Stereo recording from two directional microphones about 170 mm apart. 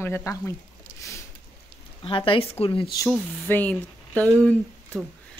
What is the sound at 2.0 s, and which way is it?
Speech, 30° left (ahead or behind).